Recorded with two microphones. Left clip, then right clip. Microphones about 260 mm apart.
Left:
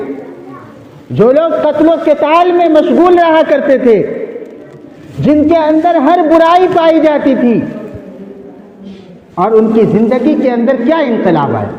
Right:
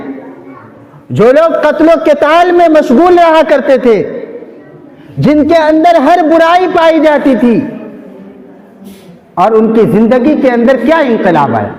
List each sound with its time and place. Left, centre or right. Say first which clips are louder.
1.1 s a man's voice: right 2 dB; right
5.2 s a man's voice: right 2 dB; right
9.3 s a man's voice: right 2 dB; right